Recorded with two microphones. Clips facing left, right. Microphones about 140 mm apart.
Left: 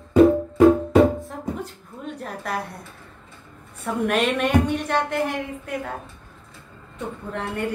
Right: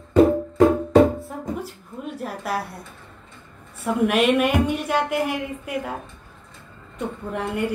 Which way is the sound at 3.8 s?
5° right (ahead or behind).